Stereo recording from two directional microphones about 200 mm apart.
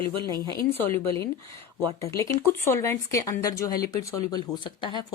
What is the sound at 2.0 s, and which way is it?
Speech, 15° left (ahead or behind).